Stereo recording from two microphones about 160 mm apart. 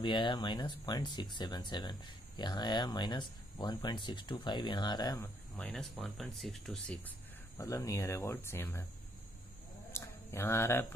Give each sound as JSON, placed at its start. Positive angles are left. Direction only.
{"t": 0.0, "sound": "speech", "side_deg": 30}
{"t": 5.6, "sound": "speech", "side_deg": 5}
{"t": 7.5, "sound": "speech", "side_deg": 20}
{"t": 9.9, "sound": "a sound", "side_deg": 15}